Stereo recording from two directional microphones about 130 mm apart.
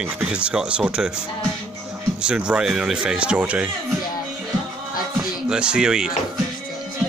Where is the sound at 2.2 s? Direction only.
5° right (ahead or behind).